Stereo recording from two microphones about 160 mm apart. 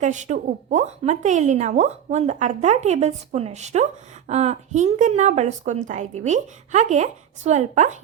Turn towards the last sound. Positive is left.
turn(degrees=-45)  # may be behind; listen again after turning